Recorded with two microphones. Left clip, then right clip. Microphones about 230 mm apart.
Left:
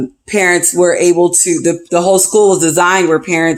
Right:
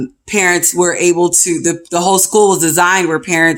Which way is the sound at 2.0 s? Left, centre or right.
Right.